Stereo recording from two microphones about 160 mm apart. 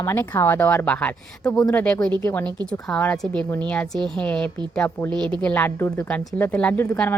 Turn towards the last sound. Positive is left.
turn(degrees=15)  # may be behind; listen again after turning